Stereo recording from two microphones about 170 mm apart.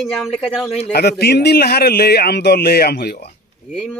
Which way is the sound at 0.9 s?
70° left (ahead or behind).